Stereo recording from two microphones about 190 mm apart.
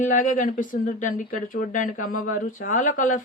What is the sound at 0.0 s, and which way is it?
A woman's voice, 45° left (ahead or behind).